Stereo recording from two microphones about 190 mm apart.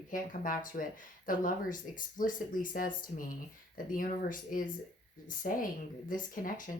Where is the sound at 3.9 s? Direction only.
45° left (ahead or behind).